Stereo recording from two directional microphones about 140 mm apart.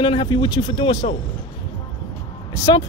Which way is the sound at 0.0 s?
35° left (ahead or behind).